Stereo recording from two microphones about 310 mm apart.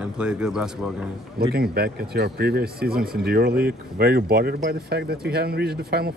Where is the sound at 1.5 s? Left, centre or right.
Right.